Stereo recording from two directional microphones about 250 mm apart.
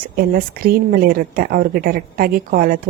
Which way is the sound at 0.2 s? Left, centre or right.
Right.